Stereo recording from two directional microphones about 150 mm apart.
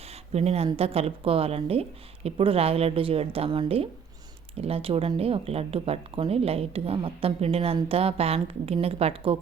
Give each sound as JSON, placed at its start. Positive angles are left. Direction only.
{"t": 0.3, "sound": "speech", "side_deg": -45}